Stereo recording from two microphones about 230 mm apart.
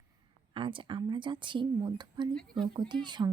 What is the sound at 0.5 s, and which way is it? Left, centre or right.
A woman's voice, right.